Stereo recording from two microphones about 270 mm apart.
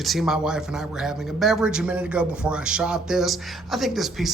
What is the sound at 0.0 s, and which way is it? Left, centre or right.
Speech, centre.